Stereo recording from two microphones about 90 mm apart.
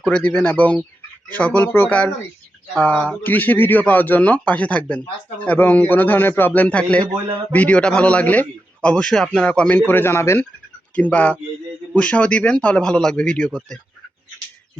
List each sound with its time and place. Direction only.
0.0 s a man's voice: 15° left (ahead or behind)
10.9 s a man's voice: 15° left (ahead or behind)